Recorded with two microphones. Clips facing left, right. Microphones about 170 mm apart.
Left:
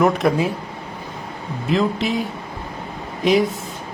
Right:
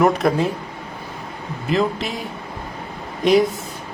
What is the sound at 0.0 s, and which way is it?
Speech, 5° left (ahead or behind).